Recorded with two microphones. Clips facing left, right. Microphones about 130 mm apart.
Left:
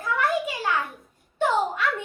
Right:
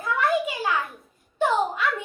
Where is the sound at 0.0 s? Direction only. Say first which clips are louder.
Right 1 dB; centre (ahead or behind).